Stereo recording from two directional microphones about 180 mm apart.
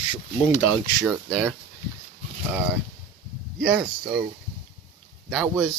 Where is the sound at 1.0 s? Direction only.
Centre (ahead or behind).